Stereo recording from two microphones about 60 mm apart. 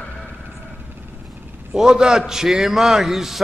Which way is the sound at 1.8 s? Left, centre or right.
Centre.